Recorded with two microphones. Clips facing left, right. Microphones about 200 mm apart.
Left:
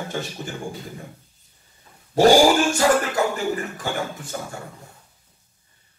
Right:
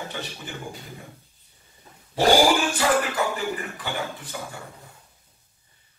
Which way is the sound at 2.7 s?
45° left (ahead or behind).